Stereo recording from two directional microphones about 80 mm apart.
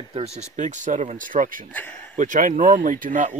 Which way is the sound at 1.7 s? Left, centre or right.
Left.